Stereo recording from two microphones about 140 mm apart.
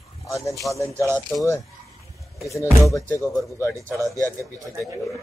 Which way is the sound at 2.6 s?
20° left (ahead or behind).